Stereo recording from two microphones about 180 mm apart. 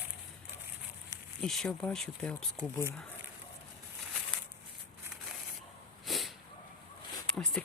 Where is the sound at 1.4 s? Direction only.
5° left (ahead or behind).